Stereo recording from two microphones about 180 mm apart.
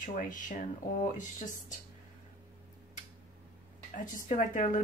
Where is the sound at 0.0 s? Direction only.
45° left (ahead or behind).